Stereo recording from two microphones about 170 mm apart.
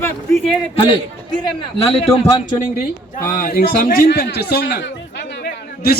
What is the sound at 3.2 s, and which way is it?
A man's voice, 60° left (ahead or behind).